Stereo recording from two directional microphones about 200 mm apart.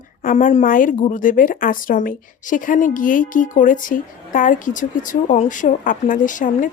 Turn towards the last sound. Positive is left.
turn(degrees=40)  # may be behind; listen again after turning